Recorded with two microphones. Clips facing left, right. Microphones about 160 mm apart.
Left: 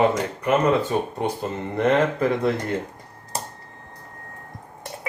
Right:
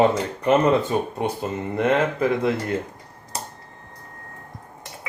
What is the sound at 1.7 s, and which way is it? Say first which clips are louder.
Speech: left 1 dB; 5° right (ahead or behind).